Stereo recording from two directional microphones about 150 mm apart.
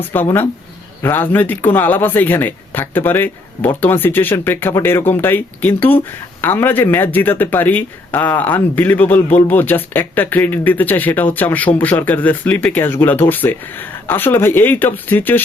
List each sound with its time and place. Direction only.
0.1 s speech: 15° left (ahead or behind)